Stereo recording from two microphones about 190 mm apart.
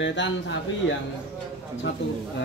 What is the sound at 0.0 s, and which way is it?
Speech, 70° left (ahead or behind).